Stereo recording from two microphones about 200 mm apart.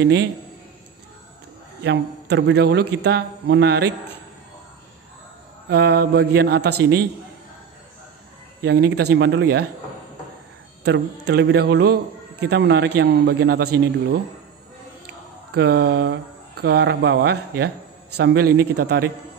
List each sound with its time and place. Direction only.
0.0 s speech: 55° right (ahead or behind)
1.8 s speech: 60° right (ahead or behind)
5.7 s speech: 55° right (ahead or behind)
8.6 s speech: 55° right (ahead or behind)
10.8 s speech: 55° right (ahead or behind)
15.5 s speech: 55° right (ahead or behind)